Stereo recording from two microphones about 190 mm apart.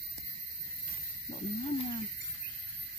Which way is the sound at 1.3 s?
30° left (ahead or behind).